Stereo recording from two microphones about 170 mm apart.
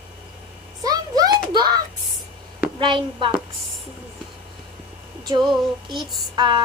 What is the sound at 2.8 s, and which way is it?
Speech, 30° right (ahead or behind).